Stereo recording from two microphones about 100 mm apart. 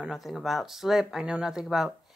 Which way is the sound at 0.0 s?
Centre (ahead or behind).